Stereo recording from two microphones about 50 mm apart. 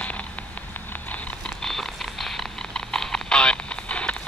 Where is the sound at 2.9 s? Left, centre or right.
Centre.